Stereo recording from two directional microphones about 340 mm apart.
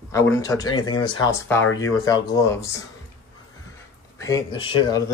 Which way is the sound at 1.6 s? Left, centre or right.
Left.